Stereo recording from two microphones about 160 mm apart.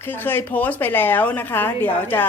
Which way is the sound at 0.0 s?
10° left (ahead or behind).